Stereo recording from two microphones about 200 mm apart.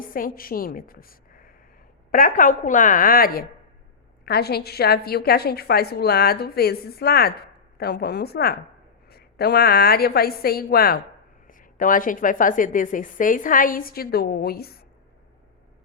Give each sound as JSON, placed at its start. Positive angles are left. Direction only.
{"t": 0.1, "sound": "a woman's voice", "side_deg": 45}